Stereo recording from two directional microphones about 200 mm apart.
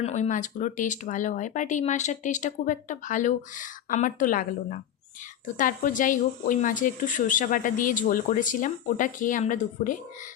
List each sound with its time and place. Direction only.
0.0 s speech: 35° left (ahead or behind)